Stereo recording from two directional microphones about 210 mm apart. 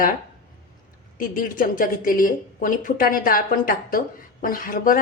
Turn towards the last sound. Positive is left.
turn(degrees=40)  # may be behind; listen again after turning